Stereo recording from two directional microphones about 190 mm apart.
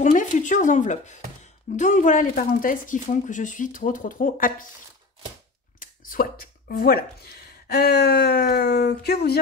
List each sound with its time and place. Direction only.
0.0 s speech: 40° left (ahead or behind)
5.8 s a sound: 50° left (ahead or behind)
6.7 s speech: 55° left (ahead or behind)